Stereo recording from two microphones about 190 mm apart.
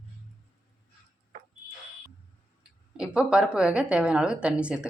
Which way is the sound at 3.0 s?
5° right (ahead or behind).